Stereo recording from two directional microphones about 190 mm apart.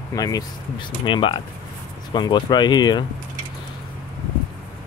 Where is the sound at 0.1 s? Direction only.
20° left (ahead or behind).